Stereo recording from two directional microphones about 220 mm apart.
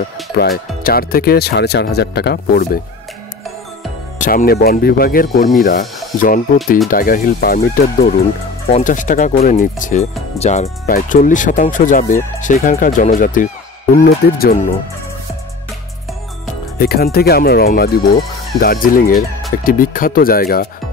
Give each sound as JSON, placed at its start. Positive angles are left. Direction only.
{"t": 0.4, "sound": "speech", "side_deg": 45}
{"t": 4.2, "sound": "speech", "side_deg": 40}
{"t": 16.7, "sound": "speech", "side_deg": 45}